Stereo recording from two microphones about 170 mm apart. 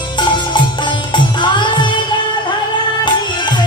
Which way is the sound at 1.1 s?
25° left (ahead or behind).